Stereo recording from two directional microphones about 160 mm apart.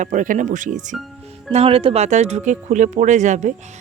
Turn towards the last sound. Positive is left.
turn(degrees=-50)  # may be behind; listen again after turning